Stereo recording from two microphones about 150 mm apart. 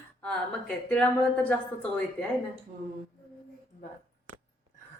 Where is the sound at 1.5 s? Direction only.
10° left (ahead or behind).